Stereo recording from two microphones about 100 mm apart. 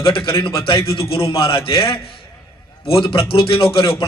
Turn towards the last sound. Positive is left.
turn(degrees=65)  # may be behind; listen again after turning